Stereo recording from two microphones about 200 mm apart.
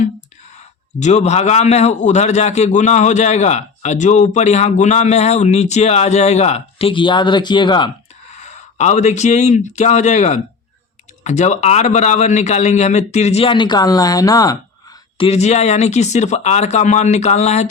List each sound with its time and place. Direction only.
0.9 s a man's voice: 35° left (ahead or behind)
8.4 s a man's voice: 35° left (ahead or behind); by 14.6 s 20° left (ahead or behind)
15.2 s a man's voice: 30° left (ahead or behind)